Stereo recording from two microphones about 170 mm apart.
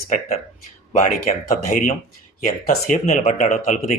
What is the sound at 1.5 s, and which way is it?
Speech, 45° left (ahead or behind).